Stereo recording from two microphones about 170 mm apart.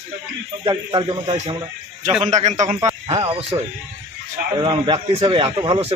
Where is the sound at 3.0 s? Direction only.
25° right (ahead or behind).